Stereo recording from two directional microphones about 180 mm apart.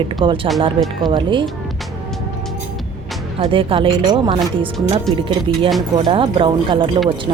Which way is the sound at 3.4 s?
30° right (ahead or behind).